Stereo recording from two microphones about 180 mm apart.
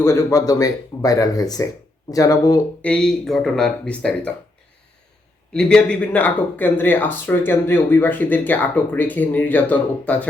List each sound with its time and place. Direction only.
0.0 s speech: 15° left (ahead or behind)
2.8 s speech: 5° left (ahead or behind)
5.5 s speech: 5° left (ahead or behind)